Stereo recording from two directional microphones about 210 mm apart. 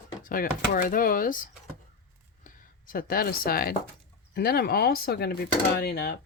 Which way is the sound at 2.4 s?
40° left (ahead or behind).